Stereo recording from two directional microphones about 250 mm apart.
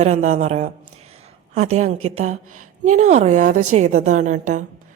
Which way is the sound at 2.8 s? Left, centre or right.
Right.